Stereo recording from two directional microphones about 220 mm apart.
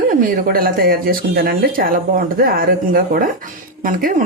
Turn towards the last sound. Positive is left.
turn(degrees=-40)  # may be behind; listen again after turning